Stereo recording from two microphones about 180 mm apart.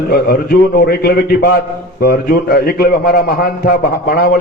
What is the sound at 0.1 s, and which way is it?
A man's voice, 55° left (ahead or behind).